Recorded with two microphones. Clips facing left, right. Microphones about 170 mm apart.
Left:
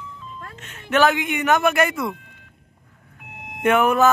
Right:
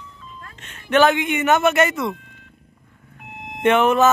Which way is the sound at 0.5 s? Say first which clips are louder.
Left 3 dB; 5° left (ahead or behind).